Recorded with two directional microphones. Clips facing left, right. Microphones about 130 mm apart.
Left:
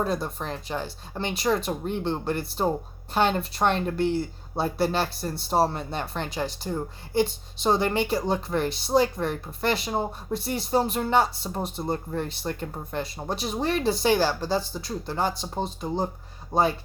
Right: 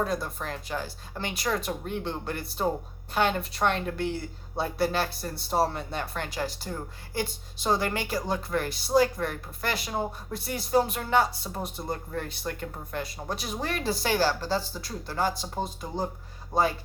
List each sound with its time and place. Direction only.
0.0 s speech: 25° left (ahead or behind)